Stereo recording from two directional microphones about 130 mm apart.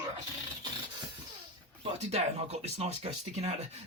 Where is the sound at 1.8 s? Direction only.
55° right (ahead or behind).